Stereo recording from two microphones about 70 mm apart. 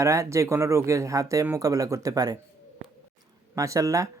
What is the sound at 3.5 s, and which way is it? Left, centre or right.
Speech, right.